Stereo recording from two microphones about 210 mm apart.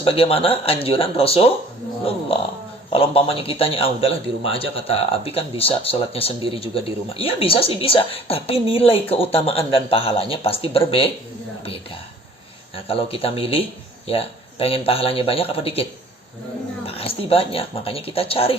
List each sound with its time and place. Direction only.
0.0 s a man's voice: 25° left (ahead or behind)
2.9 s a man's voice: 25° left (ahead or behind)